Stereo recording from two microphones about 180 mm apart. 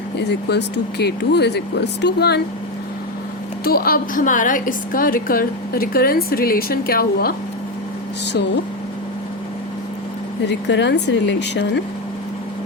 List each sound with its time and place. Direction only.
0.2 s speech: 70° left (ahead or behind)
3.6 s a woman's voice: 55° left (ahead or behind)
10.4 s speech: 75° left (ahead or behind)